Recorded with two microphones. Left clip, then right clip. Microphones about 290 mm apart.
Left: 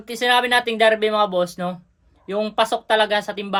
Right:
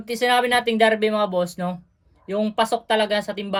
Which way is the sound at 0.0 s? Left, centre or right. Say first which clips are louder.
Left 1 dB; centre.